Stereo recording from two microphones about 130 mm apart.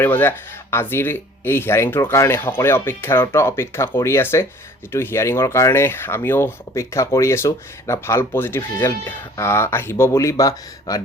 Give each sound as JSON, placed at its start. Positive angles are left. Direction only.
{"t": 0.0, "sound": "speech", "side_deg": 15}